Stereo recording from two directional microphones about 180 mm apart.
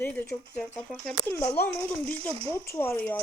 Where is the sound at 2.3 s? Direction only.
30° right (ahead or behind).